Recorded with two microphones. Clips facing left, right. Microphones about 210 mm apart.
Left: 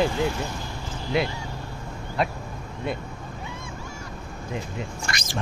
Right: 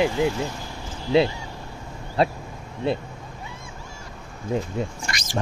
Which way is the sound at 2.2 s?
30° right (ahead or behind).